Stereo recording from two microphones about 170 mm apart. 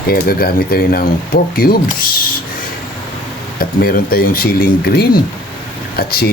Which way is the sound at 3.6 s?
60° left (ahead or behind).